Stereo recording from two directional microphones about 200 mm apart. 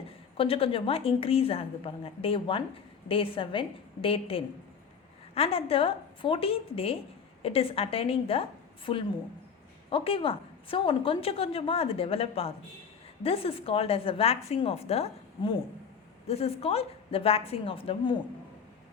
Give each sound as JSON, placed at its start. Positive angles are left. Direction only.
{"t": 0.3, "sound": "a woman's voice", "side_deg": 30}